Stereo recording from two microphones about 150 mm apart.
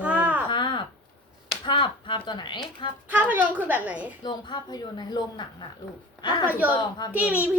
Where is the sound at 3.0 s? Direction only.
10° right (ahead or behind).